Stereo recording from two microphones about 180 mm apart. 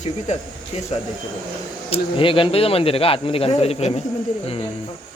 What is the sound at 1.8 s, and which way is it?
Speech, 30° left (ahead or behind).